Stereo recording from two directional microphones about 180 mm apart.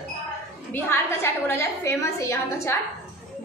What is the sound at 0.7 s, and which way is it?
A woman's voice, 15° left (ahead or behind).